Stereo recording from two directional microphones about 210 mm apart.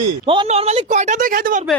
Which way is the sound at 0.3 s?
30° right (ahead or behind).